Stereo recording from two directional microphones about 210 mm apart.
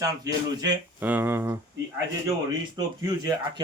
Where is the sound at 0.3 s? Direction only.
15° right (ahead or behind).